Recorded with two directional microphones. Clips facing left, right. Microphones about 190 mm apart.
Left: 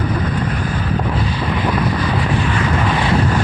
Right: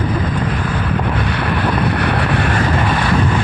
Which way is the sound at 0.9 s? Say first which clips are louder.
Even; 65° right (ahead or behind).